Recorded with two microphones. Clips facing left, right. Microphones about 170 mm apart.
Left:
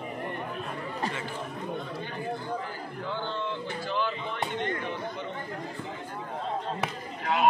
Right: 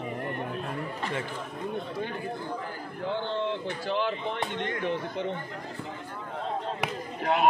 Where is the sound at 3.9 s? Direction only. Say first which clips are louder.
Right 3 dB; 75° right (ahead or behind).